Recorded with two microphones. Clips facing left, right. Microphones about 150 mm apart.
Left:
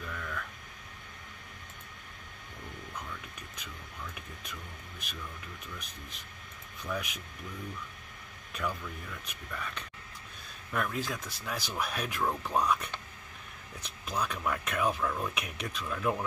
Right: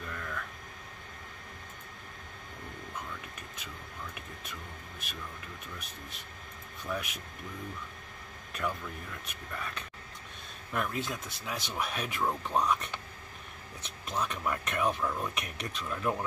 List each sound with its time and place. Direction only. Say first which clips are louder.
0.0 s a sound: even; centre (ahead or behind)
6.8 s speech: even; centre (ahead or behind)
8.5 s speech: right 1 dB; centre (ahead or behind)